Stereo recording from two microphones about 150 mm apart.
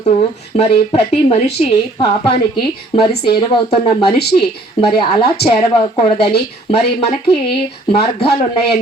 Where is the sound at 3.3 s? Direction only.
35° left (ahead or behind).